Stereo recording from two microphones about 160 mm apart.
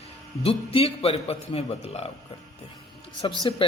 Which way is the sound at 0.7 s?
40° left (ahead or behind).